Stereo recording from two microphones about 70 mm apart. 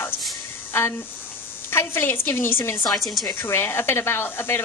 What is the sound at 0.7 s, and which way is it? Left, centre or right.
Speech, left.